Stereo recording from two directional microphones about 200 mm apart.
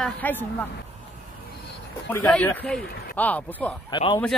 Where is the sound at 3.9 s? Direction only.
25° left (ahead or behind).